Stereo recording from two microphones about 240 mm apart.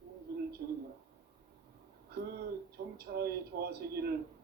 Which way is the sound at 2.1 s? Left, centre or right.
Right.